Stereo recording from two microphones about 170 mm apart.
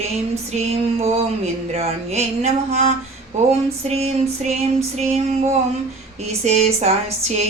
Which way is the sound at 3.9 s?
40° right (ahead or behind).